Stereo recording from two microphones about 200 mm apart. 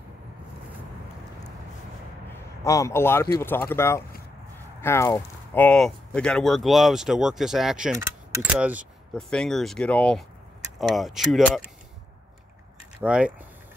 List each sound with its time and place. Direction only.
2.6 s speech: 15° left (ahead or behind); by 8.8 s 5° right (ahead or behind)
9.1 s speech: 5° left (ahead or behind)
13.0 s speech: 5° right (ahead or behind)